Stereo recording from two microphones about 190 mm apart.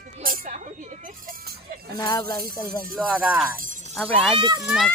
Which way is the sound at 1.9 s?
20° left (ahead or behind).